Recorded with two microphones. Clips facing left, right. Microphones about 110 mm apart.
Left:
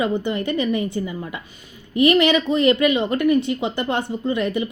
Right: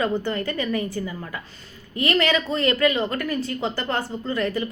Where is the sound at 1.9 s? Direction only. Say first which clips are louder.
Left 6 dB; 20° left (ahead or behind).